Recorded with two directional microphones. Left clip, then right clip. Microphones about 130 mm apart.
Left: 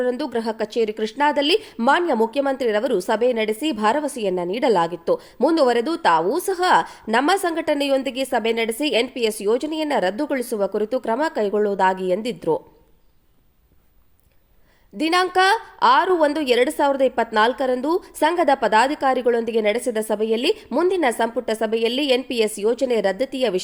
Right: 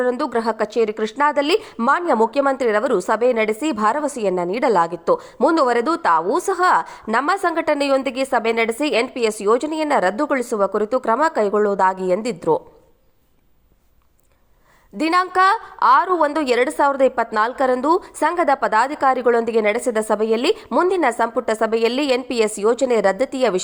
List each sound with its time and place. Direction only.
0.0 s a woman's voice: 15° left (ahead or behind)
14.9 s a woman's voice: 15° left (ahead or behind)